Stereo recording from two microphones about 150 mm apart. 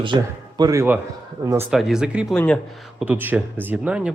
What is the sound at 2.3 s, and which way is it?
Speech, 5° left (ahead or behind).